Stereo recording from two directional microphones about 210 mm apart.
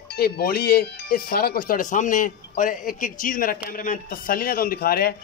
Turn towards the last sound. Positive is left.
turn(degrees=45)  # may be behind; listen again after turning